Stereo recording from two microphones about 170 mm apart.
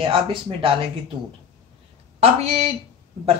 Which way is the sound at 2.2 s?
35° right (ahead or behind).